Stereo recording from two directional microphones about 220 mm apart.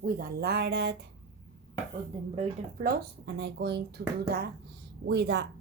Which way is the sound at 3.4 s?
50° right (ahead or behind).